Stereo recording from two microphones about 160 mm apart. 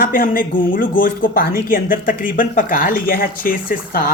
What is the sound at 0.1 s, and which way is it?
Speech, 60° left (ahead or behind).